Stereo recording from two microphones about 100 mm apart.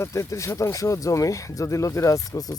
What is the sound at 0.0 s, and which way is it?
Speech, 30° left (ahead or behind).